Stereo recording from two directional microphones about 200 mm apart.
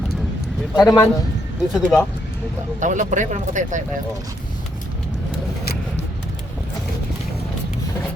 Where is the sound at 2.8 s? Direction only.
40° right (ahead or behind).